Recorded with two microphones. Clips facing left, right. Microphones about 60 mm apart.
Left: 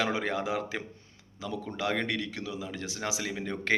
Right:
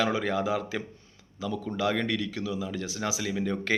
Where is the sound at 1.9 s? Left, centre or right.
Left.